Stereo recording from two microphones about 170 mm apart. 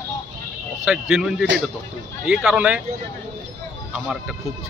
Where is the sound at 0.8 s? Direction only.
5° right (ahead or behind).